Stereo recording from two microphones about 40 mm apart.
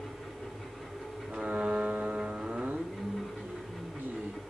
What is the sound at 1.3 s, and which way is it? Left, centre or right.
Music, right.